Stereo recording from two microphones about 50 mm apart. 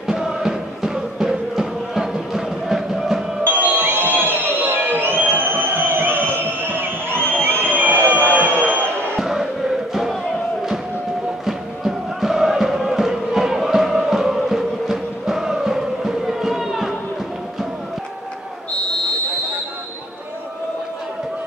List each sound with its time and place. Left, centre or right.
0.0 s music: centre
3.4 s crowd: right
6.2 s a sound: right
7.2 s crowd: left
7.7 s a sound: right
9.2 s crowd: centre
11.4 s music: centre